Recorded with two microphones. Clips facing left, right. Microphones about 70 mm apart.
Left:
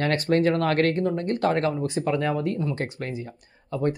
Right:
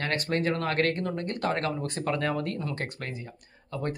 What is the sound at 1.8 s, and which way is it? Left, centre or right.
Speech, centre.